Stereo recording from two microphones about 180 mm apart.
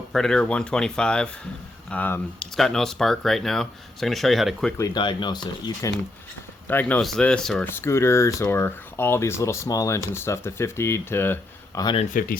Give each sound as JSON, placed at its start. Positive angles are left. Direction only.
{"t": 0.1, "sound": "speech", "side_deg": 5}
{"t": 4.8, "sound": "speech", "side_deg": 25}
{"t": 6.7, "sound": "speech", "side_deg": 10}
{"t": 12.1, "sound": "speech", "side_deg": 50}